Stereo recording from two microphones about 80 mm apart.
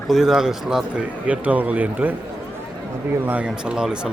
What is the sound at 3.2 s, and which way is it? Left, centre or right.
Speech, centre.